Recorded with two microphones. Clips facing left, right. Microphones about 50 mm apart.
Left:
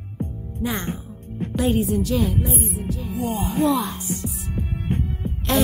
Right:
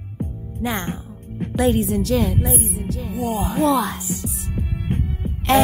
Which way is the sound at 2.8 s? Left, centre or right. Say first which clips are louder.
Right 1 dB; right.